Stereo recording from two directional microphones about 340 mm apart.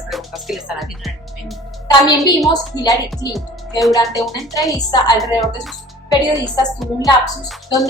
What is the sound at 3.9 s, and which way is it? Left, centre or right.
Speech, centre.